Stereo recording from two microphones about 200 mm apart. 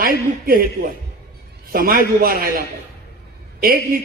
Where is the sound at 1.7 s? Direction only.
50° right (ahead or behind).